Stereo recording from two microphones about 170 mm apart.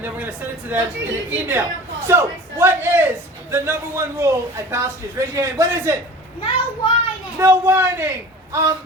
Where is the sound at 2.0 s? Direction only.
15° right (ahead or behind).